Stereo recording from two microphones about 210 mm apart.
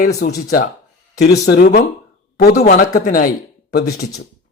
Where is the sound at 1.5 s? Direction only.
40° left (ahead or behind).